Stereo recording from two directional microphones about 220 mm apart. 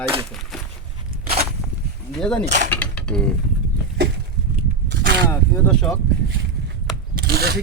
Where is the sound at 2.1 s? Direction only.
5° left (ahead or behind).